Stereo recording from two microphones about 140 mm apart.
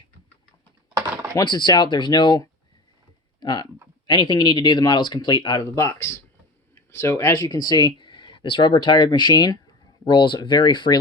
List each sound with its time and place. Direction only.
0.9 s typing: 20° right (ahead or behind)
1.4 s speech: 30° left (ahead or behind)
5.7 s speech: 20° left (ahead or behind)